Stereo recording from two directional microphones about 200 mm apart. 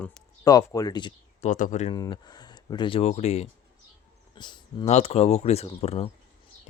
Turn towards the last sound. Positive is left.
turn(degrees=30)  # may be behind; listen again after turning